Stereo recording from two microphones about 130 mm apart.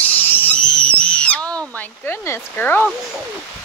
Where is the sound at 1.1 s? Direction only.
10° left (ahead or behind).